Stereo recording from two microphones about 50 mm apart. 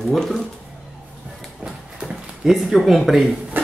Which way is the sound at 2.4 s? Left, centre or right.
Centre.